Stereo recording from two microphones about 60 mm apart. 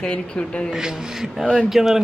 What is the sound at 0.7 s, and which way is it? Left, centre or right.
Speech, centre.